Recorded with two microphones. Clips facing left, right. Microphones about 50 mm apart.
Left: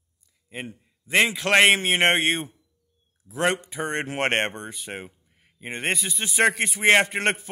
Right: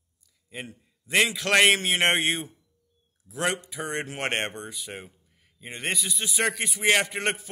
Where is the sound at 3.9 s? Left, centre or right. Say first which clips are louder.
Left 5 dB; left.